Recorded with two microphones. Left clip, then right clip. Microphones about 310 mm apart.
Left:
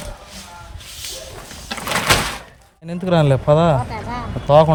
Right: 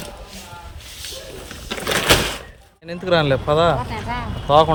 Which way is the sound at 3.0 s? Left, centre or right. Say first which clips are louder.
Even; left.